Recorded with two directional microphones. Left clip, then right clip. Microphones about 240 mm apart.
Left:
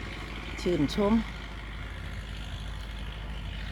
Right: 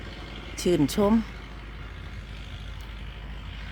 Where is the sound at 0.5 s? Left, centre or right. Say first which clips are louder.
Right 5 dB; right.